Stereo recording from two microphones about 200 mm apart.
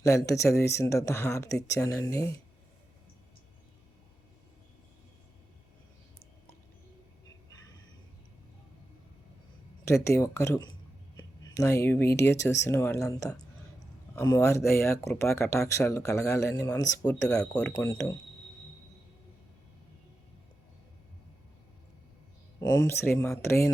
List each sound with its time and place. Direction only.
0.0 s speech: 15° left (ahead or behind)
9.8 s speech: 15° left (ahead or behind)
17.7 s speech: 15° left (ahead or behind)
22.9 s speech: 10° left (ahead or behind)